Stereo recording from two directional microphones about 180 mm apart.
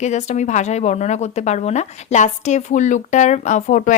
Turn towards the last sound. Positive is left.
turn(degrees=45)  # may be behind; listen again after turning